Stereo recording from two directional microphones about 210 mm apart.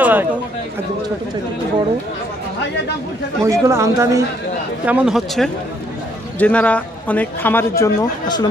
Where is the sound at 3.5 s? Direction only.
15° right (ahead or behind).